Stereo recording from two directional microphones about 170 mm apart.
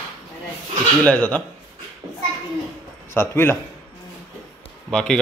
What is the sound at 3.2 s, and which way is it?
Speech, 15° left (ahead or behind).